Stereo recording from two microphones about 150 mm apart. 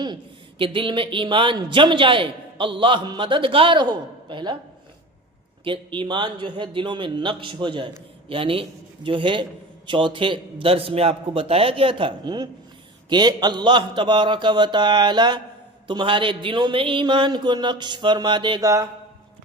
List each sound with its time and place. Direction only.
0.6 s a man's voice: 35° right (ahead or behind)
5.6 s a man's voice: 35° right (ahead or behind)